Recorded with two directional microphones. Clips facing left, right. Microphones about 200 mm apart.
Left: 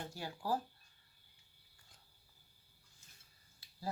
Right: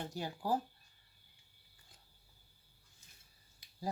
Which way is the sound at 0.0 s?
20° right (ahead or behind).